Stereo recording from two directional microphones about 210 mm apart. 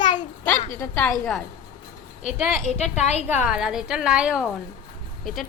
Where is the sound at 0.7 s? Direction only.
15° left (ahead or behind).